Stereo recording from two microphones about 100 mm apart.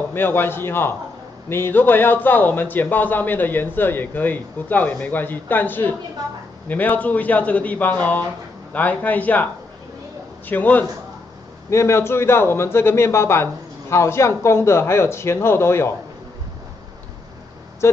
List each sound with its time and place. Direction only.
0.1 s a man's voice: 20° left (ahead or behind)
10.5 s a man's voice: 20° left (ahead or behind)